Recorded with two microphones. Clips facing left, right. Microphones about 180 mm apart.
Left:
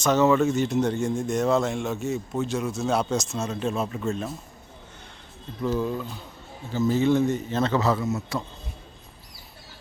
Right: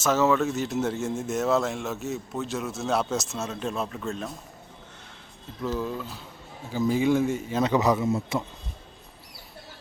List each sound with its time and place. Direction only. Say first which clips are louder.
0.0 s speech: left 3 dB; centre (ahead or behind)
5.6 s speech: left 3 dB; centre (ahead or behind)
6.7 s a man's voice: left 1 dB; 10° right (ahead or behind)